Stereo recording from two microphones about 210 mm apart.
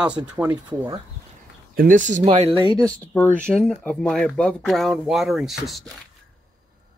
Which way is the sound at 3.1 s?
5° left (ahead or behind).